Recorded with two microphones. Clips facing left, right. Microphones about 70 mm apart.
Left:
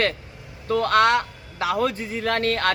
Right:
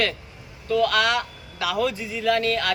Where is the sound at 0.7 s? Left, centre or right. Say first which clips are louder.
Left 2 dB; left.